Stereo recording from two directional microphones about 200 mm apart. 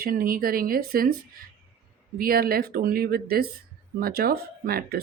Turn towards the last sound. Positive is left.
turn(degrees=-50)  # may be behind; listen again after turning